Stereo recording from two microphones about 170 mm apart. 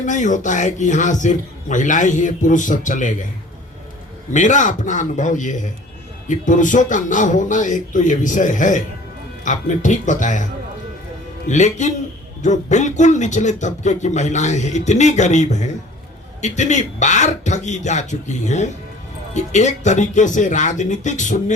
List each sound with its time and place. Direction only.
0.0 s speech: 45° left (ahead or behind)
4.3 s speech: 45° left (ahead or behind)